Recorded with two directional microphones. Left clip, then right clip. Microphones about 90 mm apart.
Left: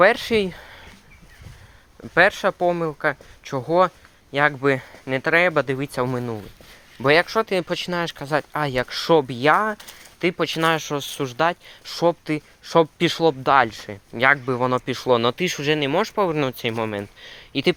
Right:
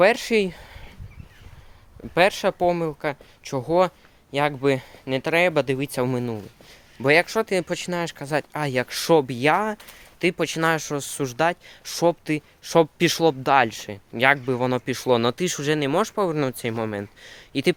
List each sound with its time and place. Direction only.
0.0 s speech: 25° right (ahead or behind)
2.1 s speech: 25° right (ahead or behind)
2.8 s speech: 25° right (ahead or behind)
5.5 s speech: 35° right (ahead or behind)
7.0 s speech: 20° right (ahead or behind)
8.7 s speech: 50° right (ahead or behind)
9.1 s speech: 40° right (ahead or behind)
13.1 s speech: 60° right (ahead or behind)
13.4 s speech: 40° right (ahead or behind)
14.4 s speech: 30° right (ahead or behind)
17.2 s speech: 30° right (ahead or behind)